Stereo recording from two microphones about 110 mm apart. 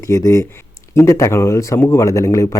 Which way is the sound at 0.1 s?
25° left (ahead or behind).